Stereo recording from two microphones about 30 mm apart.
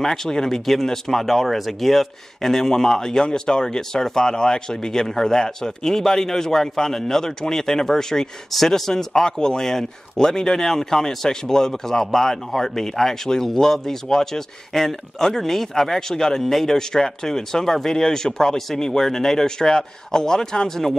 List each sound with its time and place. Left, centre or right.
0.0 s speech: centre
0.7 s speech: centre